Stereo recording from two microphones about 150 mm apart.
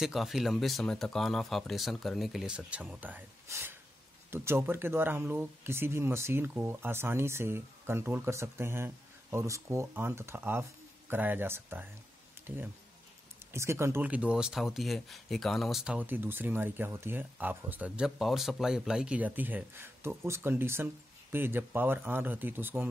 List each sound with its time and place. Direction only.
0.0 s speech: centre (ahead or behind)
12.4 s a sound: 15° right (ahead or behind)
13.5 s speech: 20° right (ahead or behind)